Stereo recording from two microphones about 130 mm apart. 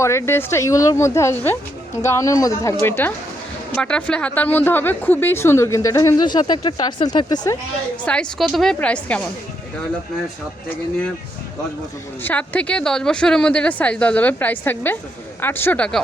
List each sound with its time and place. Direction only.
0.0 s a woman's voice: 20° left (ahead or behind)
8.0 s a woman's voice: 5° left (ahead or behind)
12.2 s a woman's voice: 10° left (ahead or behind)